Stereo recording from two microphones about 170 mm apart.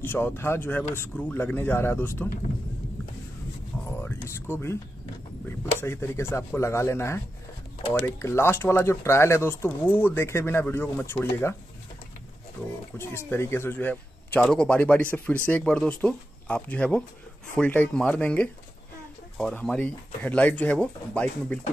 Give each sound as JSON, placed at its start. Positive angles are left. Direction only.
{"t": 0.0, "sound": "speech", "side_deg": 10}
{"t": 4.0, "sound": "speech", "side_deg": 15}
{"t": 5.8, "sound": "speech", "side_deg": 15}
{"t": 8.2, "sound": "speech", "side_deg": 15}
{"t": 12.9, "sound": "speech", "side_deg": 15}